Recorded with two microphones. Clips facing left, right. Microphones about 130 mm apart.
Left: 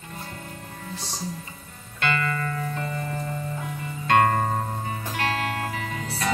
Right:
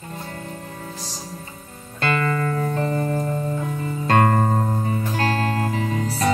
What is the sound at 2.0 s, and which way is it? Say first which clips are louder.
Music: right 4 dB; 35° right (ahead or behind).